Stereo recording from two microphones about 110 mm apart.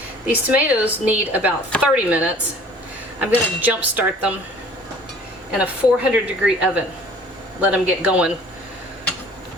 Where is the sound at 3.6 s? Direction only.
15° right (ahead or behind).